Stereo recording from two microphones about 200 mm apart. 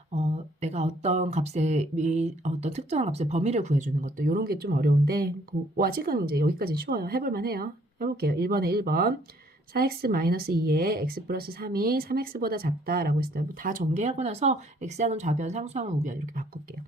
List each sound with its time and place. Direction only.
0.1 s speech: 35° right (ahead or behind)